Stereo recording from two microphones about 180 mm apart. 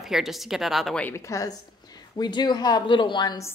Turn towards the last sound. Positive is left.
turn(degrees=25)  # may be behind; listen again after turning